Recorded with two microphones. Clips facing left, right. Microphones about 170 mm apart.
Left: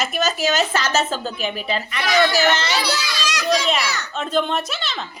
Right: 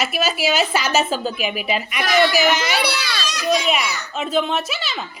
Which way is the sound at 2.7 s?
65° right (ahead or behind).